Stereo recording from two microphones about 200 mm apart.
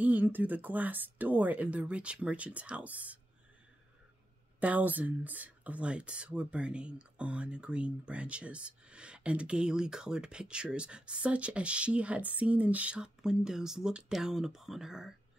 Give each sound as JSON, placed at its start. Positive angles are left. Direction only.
{"t": 0.0, "sound": "speech", "side_deg": -10}
{"t": 4.6, "sound": "speech", "side_deg": -10}